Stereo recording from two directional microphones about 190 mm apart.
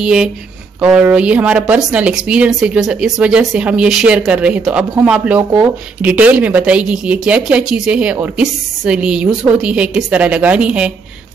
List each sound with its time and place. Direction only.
0.0 s a woman's voice: 5° right (ahead or behind)